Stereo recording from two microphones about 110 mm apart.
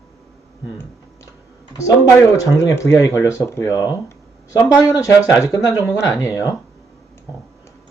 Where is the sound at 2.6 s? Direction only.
30° left (ahead or behind).